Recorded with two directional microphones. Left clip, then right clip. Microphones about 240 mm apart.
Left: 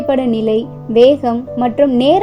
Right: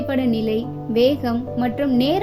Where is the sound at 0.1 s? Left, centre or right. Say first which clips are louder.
Left 8 dB; centre.